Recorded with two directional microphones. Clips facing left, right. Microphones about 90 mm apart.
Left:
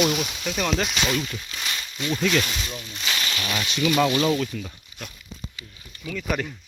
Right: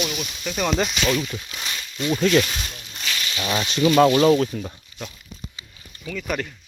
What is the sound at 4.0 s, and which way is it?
Speech, 35° right (ahead or behind).